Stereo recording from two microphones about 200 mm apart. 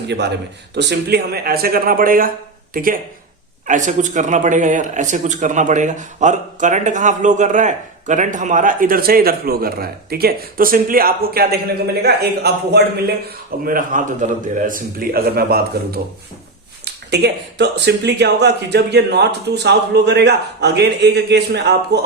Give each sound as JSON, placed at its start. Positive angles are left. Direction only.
{"t": 0.1, "sound": "speech", "side_deg": -60}